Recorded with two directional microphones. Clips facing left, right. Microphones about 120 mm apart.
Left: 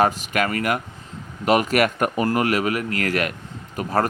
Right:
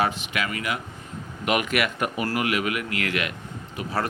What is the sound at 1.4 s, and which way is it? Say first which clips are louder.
Speech: left 6 dB; 35° left (ahead or behind).